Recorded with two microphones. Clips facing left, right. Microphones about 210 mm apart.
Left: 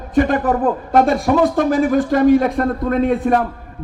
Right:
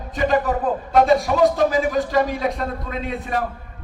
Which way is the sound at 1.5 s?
50° left (ahead or behind).